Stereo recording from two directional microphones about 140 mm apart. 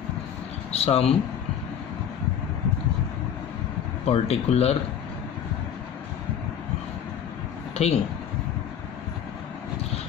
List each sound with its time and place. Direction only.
0.7 s speech: 45° left (ahead or behind)
4.0 s speech: 45° left (ahead or behind)
7.7 s speech: 50° left (ahead or behind)